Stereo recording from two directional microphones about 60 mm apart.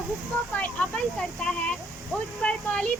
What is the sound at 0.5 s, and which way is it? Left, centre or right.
Speech, left.